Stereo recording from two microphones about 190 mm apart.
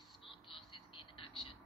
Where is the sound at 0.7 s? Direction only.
25° left (ahead or behind).